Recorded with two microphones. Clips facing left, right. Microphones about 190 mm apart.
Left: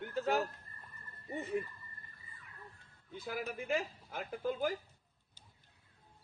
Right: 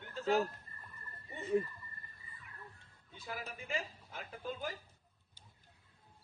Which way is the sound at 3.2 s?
65° left (ahead or behind).